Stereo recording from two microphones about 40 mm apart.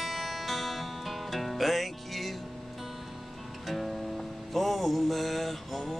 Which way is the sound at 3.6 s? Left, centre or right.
Centre.